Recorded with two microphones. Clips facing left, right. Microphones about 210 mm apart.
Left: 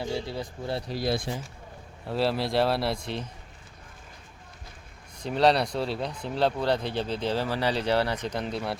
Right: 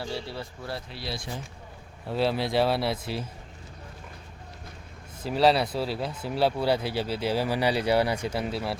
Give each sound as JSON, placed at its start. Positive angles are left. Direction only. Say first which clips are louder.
{"t": 0.0, "sound": "speech", "louder": "left 3 dB", "side_deg": 15}
{"t": 0.9, "sound": "speech", "louder": "left 8 dB", "side_deg": 45}
{"t": 2.0, "sound": "speech", "louder": "even", "side_deg": 0}
{"t": 5.2, "sound": "speech", "louder": "even", "side_deg": -5}